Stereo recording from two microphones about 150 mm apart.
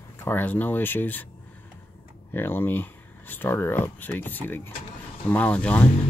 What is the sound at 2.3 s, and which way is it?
Speech, 15° left (ahead or behind).